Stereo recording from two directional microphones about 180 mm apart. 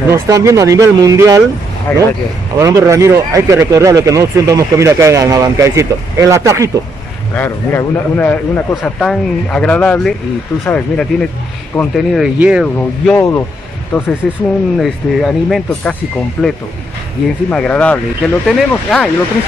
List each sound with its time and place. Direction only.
0.1 s speech: 15° right (ahead or behind)
1.9 s speech: 5° left (ahead or behind)
2.5 s speech: 15° right (ahead or behind)
7.3 s a man's voice: 10° left (ahead or behind); by 12.6 s 5° right (ahead or behind)
12.7 s a man's voice: 10° left (ahead or behind)